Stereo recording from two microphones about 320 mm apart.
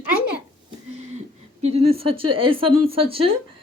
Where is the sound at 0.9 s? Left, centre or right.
Centre.